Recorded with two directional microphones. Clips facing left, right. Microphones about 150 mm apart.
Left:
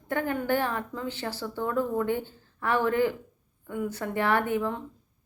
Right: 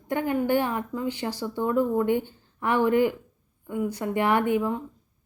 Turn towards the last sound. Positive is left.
turn(degrees=-10)  # may be behind; listen again after turning